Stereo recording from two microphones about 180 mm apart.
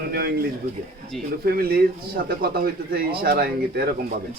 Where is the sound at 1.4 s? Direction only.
55° right (ahead or behind).